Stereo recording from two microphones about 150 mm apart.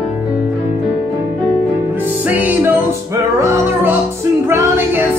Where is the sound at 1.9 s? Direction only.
15° right (ahead or behind).